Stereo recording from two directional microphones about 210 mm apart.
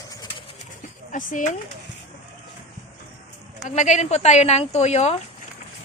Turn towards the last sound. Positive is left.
turn(degrees=30)  # may be behind; listen again after turning